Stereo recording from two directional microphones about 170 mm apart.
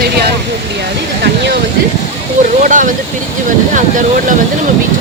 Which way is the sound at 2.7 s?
50° right (ahead or behind).